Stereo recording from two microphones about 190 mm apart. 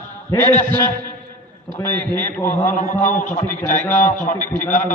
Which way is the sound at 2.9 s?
40° left (ahead or behind).